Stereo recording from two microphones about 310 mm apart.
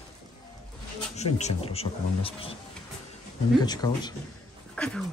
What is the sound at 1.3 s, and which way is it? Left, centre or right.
Speech, left.